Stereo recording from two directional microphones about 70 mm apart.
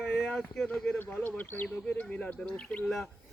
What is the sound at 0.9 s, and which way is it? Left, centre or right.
Speech, left.